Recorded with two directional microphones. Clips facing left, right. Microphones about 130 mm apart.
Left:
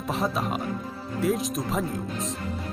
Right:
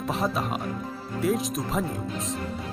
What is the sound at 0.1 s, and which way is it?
Speech, centre (ahead or behind).